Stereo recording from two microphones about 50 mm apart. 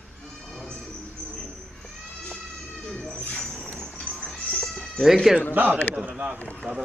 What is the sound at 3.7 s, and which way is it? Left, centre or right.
Goat, centre.